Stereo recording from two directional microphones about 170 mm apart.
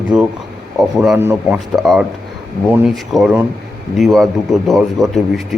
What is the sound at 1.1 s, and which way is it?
Speech, 10° right (ahead or behind).